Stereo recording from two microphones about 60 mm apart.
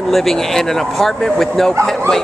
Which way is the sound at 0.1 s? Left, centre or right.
Centre.